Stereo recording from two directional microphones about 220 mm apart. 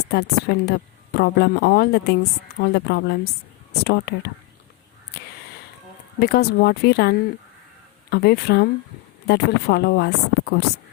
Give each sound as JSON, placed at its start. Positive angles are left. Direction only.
{"t": 0.1, "sound": "a woman's voice", "side_deg": 45}
{"t": 5.1, "sound": "a sound", "side_deg": 50}
{"t": 6.1, "sound": "a woman's voice", "side_deg": 45}